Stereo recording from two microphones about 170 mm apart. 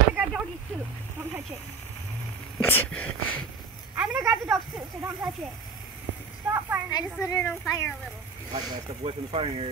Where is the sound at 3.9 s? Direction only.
10° right (ahead or behind).